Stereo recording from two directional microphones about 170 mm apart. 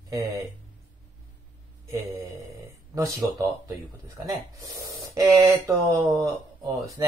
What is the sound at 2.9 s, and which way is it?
Speech, 20° right (ahead or behind).